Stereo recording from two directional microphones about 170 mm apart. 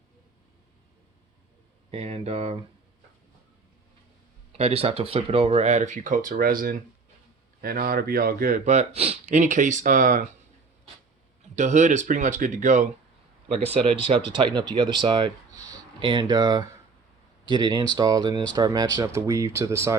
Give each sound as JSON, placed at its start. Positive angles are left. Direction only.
{"t": 1.9, "sound": "speech", "side_deg": -35}
{"t": 4.5, "sound": "speech", "side_deg": -35}
{"t": 11.5, "sound": "speech", "side_deg": -45}
{"t": 13.8, "sound": "speech", "side_deg": -35}